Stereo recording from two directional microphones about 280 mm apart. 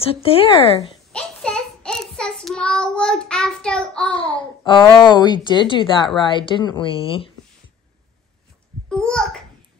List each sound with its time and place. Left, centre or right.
0.1 s speech: centre
1.1 s child singing: centre
4.4 s a woman's voice: centre
8.8 s a child's voice: centre